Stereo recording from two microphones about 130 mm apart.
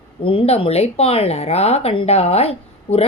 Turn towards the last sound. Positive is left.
turn(degrees=50)  # may be behind; listen again after turning